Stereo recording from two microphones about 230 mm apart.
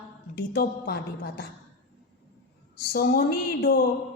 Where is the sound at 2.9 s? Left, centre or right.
Left.